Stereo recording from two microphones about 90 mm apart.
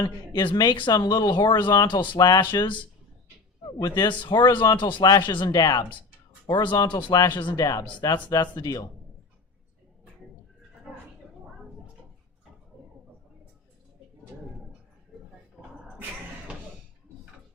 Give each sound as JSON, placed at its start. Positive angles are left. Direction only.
{"t": 0.0, "sound": "speech", "side_deg": 55}
{"t": 3.8, "sound": "speech", "side_deg": 50}
{"t": 6.5, "sound": "speech", "side_deg": 60}
{"t": 6.8, "sound": "speech", "side_deg": 50}
{"t": 7.5, "sound": "speech", "side_deg": 45}